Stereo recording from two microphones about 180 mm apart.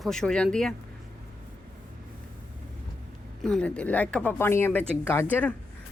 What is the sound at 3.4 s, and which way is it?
Speech, 5° left (ahead or behind).